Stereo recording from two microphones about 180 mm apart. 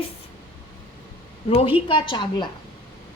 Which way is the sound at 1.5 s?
30° left (ahead or behind).